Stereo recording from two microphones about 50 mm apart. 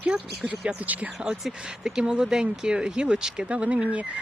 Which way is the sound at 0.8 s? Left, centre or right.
Right.